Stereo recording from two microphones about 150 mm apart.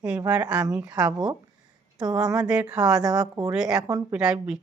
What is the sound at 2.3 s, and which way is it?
Speech, 5° right (ahead or behind).